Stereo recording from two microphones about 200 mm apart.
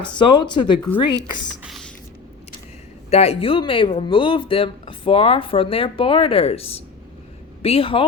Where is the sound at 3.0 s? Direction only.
30° left (ahead or behind).